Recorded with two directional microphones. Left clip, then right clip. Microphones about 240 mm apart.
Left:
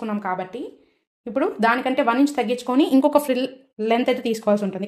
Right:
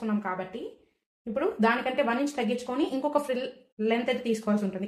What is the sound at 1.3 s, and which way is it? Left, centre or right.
Speech, left.